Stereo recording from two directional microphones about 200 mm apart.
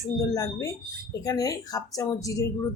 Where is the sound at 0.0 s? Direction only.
15° left (ahead or behind).